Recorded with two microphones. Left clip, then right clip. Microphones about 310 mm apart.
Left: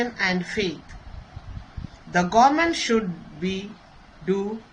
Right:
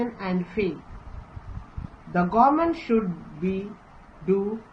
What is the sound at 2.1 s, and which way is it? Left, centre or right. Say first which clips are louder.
Speech: left 2 dB; left.